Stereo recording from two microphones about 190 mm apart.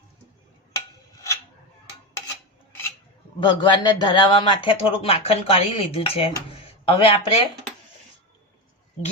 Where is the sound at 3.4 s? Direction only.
25° left (ahead or behind).